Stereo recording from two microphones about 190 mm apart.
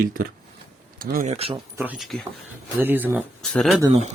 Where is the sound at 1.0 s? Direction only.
50° right (ahead or behind).